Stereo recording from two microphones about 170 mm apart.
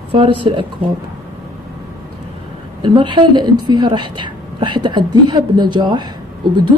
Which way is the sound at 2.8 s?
30° right (ahead or behind).